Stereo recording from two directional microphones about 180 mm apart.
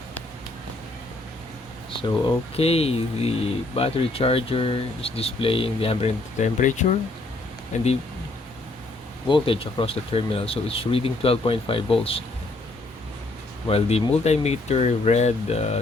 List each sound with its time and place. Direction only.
2.6 s speech: 35° left (ahead or behind)
9.3 s speech: 30° left (ahead or behind)
13.7 s speech: 35° left (ahead or behind)